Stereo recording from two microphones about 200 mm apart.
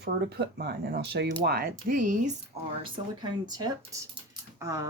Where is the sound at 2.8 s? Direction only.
25° right (ahead or behind).